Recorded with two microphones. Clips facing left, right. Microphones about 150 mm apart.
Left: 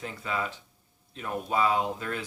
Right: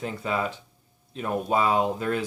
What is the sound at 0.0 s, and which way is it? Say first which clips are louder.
Speech: right 5 dB; 25° right (ahead or behind).